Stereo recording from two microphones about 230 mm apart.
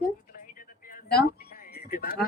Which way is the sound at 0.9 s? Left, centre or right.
Left.